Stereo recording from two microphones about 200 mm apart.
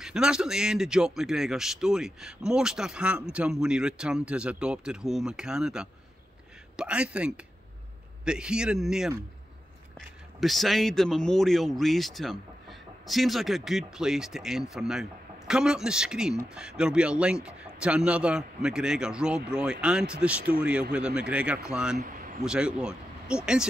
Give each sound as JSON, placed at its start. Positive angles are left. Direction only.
{"t": 0.0, "sound": "a man's voice", "side_deg": -5}
{"t": 21.9, "sound": "speech", "side_deg": -45}
{"t": 22.4, "sound": "speech", "side_deg": -5}